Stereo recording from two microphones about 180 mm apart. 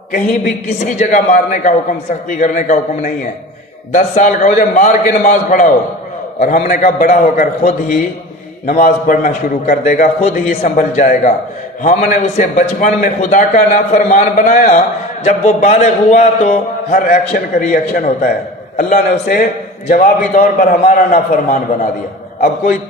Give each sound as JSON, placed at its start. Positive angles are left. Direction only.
{"t": 0.8, "sound": "a man's voice", "side_deg": 45}